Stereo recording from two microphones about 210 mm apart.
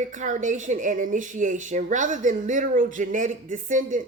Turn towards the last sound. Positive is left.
turn(degrees=-40)  # may be behind; listen again after turning